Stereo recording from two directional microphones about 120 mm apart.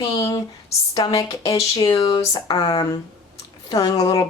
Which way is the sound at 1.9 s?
50° left (ahead or behind).